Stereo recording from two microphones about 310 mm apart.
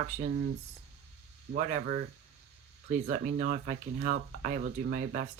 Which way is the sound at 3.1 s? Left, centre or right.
Right.